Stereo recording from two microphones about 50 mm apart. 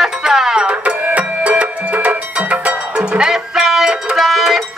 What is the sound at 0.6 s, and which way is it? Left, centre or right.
Music, right.